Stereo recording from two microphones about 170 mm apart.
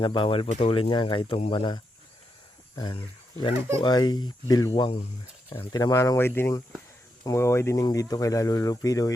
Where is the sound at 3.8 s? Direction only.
25° left (ahead or behind).